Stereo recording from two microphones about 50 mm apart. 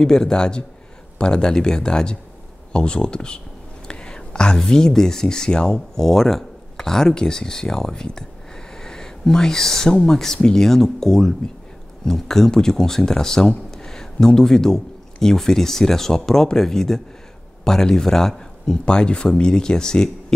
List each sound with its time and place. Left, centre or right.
0.0 s speech: centre